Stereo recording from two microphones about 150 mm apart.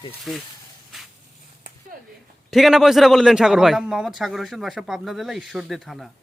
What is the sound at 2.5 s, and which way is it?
A man's voice, centre (ahead or behind).